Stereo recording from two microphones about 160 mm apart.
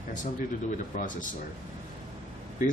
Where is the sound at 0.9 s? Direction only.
55° left (ahead or behind).